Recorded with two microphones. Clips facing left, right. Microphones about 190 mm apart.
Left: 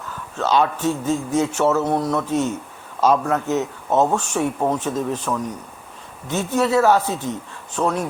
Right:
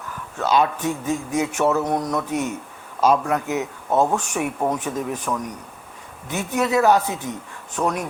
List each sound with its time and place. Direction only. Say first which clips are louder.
0.3 s a man's voice: left 1 dB; 10° right (ahead or behind)